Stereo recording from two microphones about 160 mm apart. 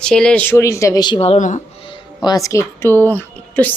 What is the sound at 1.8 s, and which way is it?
Music, 30° left (ahead or behind).